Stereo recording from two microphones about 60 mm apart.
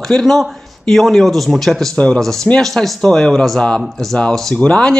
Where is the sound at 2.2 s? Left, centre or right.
Centre.